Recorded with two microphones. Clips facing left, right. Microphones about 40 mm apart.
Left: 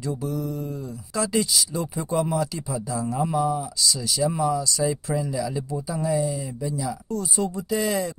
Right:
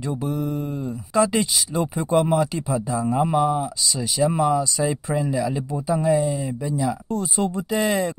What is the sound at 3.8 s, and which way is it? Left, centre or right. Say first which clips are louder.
Speech: right 2 dB; right.